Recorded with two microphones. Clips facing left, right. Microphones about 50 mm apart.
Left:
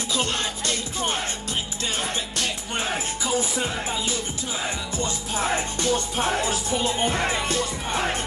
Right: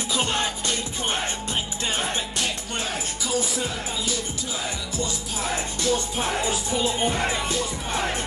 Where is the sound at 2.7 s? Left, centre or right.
Left.